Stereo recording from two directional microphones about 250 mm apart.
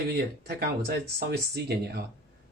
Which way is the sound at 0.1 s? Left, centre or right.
Right.